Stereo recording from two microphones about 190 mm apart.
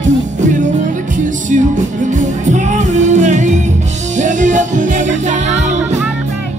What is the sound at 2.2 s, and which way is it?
Music, 40° right (ahead or behind).